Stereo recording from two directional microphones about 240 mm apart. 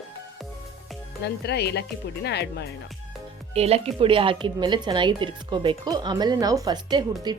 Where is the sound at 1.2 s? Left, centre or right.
Left.